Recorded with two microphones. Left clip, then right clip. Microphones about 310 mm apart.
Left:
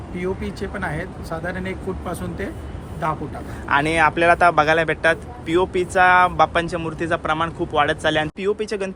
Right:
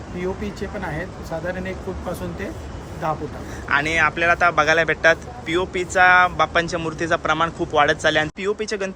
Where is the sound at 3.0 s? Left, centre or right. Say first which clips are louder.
Left 1 dB; centre.